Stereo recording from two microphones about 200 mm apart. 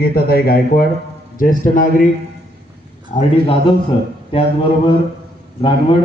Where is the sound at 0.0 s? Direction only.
50° left (ahead or behind).